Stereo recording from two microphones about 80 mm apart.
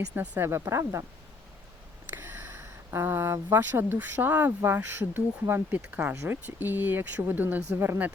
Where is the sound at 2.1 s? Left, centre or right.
Right.